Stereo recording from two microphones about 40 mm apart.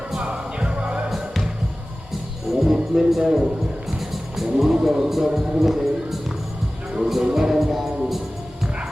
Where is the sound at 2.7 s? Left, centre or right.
Centre.